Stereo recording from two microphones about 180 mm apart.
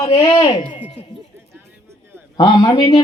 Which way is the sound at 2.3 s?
25° left (ahead or behind).